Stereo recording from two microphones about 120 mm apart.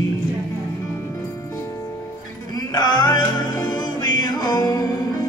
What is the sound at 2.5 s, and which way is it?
Music, 35° left (ahead or behind).